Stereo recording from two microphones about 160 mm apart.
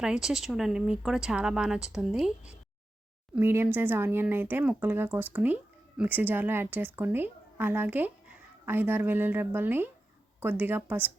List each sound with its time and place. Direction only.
0.0 s a woman's voice: 5° right (ahead or behind)